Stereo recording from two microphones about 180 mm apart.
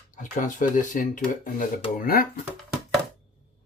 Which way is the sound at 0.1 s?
45° left (ahead or behind).